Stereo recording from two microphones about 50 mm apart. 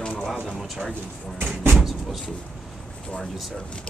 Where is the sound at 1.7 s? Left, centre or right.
Centre.